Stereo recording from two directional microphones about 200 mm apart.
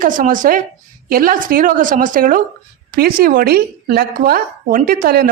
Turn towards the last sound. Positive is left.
turn(degrees=-45)  # may be behind; listen again after turning